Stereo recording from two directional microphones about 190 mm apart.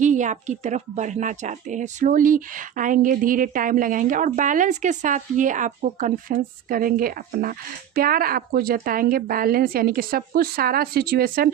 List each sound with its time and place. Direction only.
0.0 s a woman's voice: 40° right (ahead or behind)